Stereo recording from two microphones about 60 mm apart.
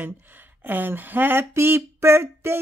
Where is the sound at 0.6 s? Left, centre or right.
Right.